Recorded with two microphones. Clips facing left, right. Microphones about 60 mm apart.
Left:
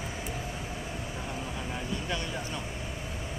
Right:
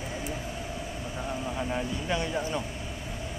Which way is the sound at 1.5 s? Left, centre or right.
Centre.